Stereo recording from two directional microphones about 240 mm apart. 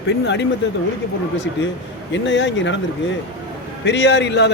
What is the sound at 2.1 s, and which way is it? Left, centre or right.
Speech, left.